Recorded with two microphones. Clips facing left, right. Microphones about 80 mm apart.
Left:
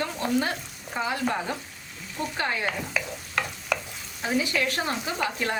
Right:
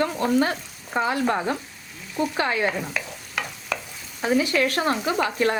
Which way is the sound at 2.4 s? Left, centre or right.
Right.